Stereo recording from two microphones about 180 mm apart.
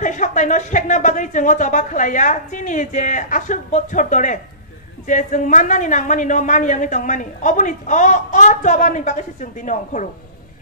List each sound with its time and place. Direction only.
0.0 s a woman's voice: 45° left (ahead or behind)